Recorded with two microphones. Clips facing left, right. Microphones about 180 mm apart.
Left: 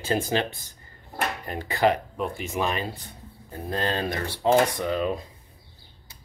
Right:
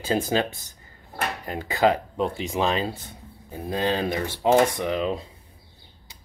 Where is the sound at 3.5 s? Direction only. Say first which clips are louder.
Right 3 dB; 10° right (ahead or behind).